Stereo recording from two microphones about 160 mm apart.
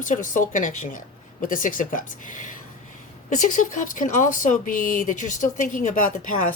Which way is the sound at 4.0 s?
55° left (ahead or behind).